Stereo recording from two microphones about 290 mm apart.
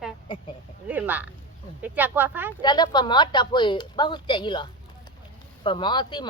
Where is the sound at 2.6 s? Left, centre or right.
Centre.